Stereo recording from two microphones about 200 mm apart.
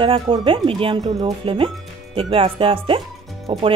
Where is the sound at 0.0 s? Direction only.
25° right (ahead or behind).